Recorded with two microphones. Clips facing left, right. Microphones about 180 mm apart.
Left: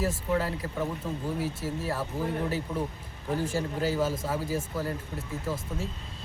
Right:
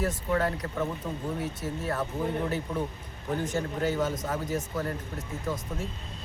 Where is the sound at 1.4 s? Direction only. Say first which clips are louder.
Left 1 dB; 25° right (ahead or behind).